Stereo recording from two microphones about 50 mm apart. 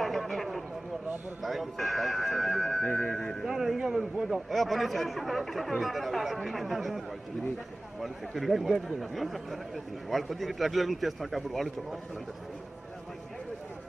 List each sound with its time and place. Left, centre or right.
0.0 s a sound: centre
1.4 s a man's voice: centre
3.1 s speech: centre
3.4 s a man's voice: centre
8.0 s a man's voice: centre